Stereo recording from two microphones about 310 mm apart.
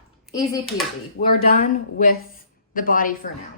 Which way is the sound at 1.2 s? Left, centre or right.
Left.